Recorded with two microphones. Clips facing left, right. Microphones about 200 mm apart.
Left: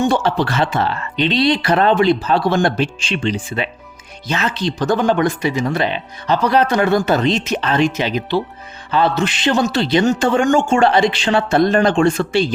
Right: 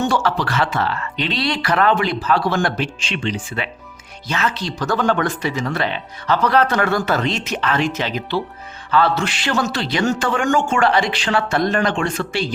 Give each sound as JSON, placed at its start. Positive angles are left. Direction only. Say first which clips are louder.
{"t": 0.0, "sound": "speech", "louder": "left 3 dB", "side_deg": 20}